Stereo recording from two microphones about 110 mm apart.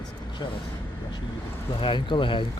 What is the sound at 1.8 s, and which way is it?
Speech, 45° left (ahead or behind).